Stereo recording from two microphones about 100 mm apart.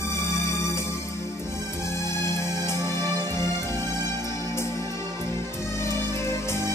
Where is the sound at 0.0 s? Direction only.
30° left (ahead or behind).